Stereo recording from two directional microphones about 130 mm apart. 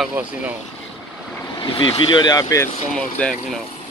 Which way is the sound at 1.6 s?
40° left (ahead or behind).